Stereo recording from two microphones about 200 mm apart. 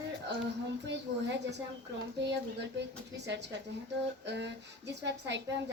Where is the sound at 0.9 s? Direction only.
60° right (ahead or behind).